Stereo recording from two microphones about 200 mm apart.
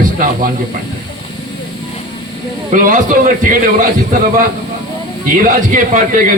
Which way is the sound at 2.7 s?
40° right (ahead or behind).